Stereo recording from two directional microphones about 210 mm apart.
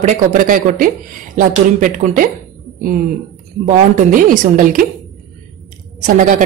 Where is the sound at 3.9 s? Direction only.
40° right (ahead or behind).